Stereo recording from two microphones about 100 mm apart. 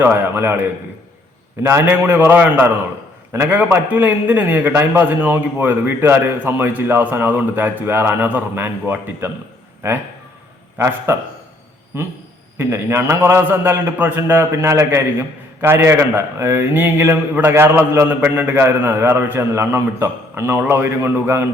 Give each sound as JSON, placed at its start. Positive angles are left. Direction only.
{"t": 0.0, "sound": "a man's voice", "side_deg": -20}
{"t": 1.6, "sound": "a man's voice", "side_deg": -20}